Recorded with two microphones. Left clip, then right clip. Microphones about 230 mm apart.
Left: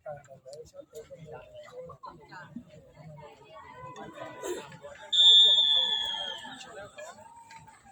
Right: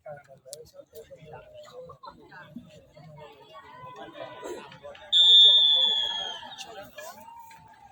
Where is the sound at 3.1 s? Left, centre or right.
Right.